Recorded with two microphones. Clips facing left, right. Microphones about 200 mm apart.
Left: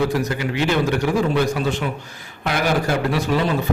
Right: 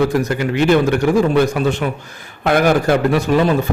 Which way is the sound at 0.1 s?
50° right (ahead or behind).